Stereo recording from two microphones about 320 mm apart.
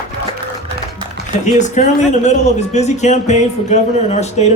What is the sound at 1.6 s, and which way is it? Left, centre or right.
Speech, left.